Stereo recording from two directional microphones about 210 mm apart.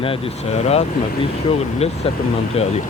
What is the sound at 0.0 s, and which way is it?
Speech, 30° left (ahead or behind).